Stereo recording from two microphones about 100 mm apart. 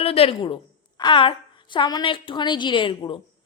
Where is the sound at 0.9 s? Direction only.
50° left (ahead or behind).